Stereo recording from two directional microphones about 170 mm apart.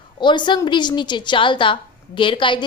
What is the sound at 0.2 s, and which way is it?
A woman's voice, 25° left (ahead or behind).